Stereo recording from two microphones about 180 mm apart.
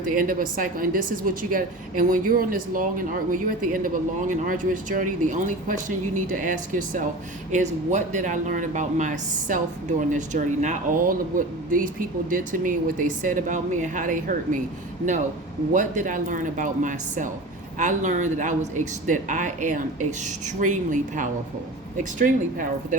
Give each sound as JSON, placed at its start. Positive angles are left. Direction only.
{"t": 0.1, "sound": "speech", "side_deg": -50}
{"t": 15.7, "sound": "speech", "side_deg": -45}